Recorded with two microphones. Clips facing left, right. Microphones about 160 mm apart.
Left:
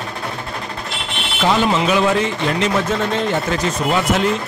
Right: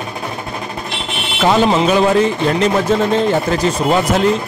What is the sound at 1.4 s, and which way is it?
Speech, 40° right (ahead or behind).